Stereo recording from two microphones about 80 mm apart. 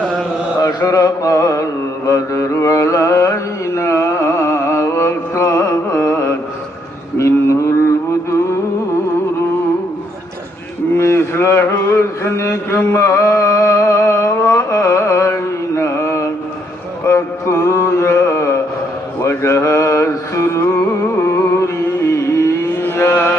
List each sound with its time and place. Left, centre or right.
0.6 s a sound: left
2.0 s mantra: left
10.9 s a sound: left
17.0 s mantra: left
20.7 s carnatic music: left
22.1 s vehicle: left
22.8 s mantra: left